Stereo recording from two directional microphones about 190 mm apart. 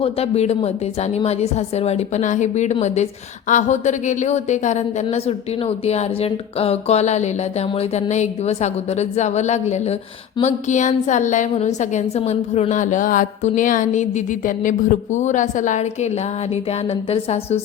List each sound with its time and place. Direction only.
0.0 s a woman's voice: 35° left (ahead or behind)